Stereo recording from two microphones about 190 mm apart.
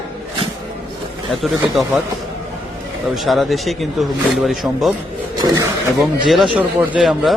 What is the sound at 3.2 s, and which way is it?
Speech, centre (ahead or behind).